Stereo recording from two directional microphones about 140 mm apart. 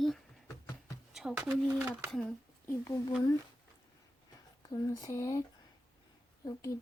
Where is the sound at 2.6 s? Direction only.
20° left (ahead or behind).